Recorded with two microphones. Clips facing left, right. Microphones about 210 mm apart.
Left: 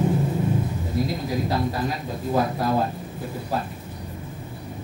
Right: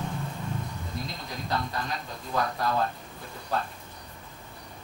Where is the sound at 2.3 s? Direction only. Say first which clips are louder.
Left 5 dB; 25° left (ahead or behind).